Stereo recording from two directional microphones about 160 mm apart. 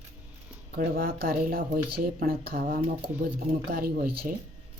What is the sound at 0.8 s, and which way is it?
Speech, 70° right (ahead or behind).